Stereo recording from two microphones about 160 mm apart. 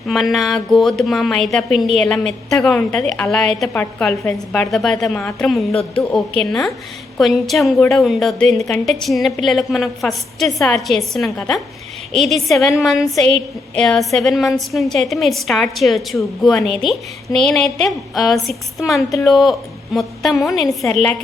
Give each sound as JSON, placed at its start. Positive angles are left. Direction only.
{"t": 0.1, "sound": "a woman's voice", "side_deg": 0}